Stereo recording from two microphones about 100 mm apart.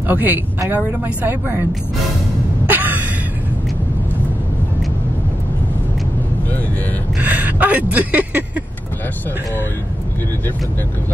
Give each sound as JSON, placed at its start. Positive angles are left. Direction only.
{"t": 0.1, "sound": "a woman's voice", "side_deg": -20}
{"t": 2.6, "sound": "a sound", "side_deg": -20}
{"t": 7.2, "sound": "speech", "side_deg": -15}